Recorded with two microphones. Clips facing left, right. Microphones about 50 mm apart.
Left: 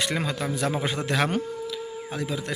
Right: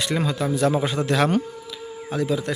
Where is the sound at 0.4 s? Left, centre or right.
Left.